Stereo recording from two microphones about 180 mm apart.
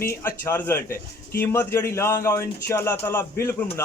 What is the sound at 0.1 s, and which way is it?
Speech, 15° left (ahead or behind).